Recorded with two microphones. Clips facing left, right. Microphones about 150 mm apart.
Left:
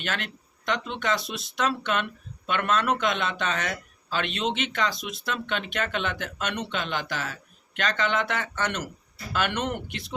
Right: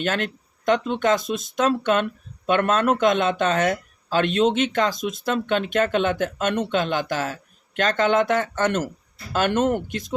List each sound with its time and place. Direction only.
0.0 s speech: 45° right (ahead or behind)